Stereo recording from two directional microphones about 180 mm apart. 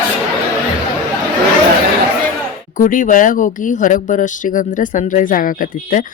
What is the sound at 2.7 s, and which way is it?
Speech, 45° left (ahead or behind).